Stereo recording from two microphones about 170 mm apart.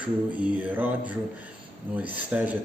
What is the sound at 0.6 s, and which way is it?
A man's voice, 10° right (ahead or behind).